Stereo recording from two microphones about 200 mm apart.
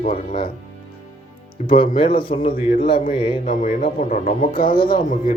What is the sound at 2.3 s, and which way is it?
Speech, 45° left (ahead or behind).